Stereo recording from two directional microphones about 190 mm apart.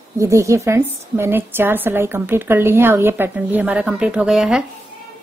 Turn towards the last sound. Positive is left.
turn(degrees=-5)  # may be behind; listen again after turning